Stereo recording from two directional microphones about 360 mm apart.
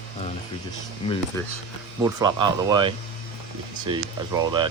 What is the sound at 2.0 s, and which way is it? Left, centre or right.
Speech, centre.